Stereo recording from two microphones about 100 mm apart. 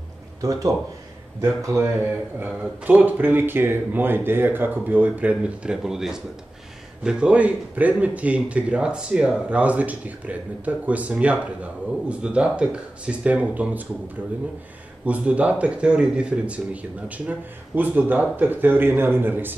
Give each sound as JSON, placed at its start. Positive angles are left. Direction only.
{"t": 0.4, "sound": "a man's voice", "side_deg": -35}
{"t": 2.4, "sound": "a man's voice", "side_deg": -15}
{"t": 15.0, "sound": "a man's voice", "side_deg": -15}